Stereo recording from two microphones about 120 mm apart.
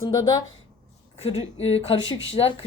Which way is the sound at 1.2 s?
60° left (ahead or behind).